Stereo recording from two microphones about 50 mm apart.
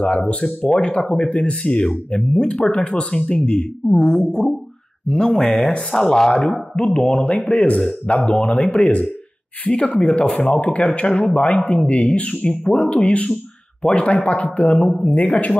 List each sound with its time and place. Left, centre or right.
0.0 s a man's voice: left
7.8 s speech: centre
8.3 s a man's voice: left; by 10.5 s centre
10.5 s a man's voice: left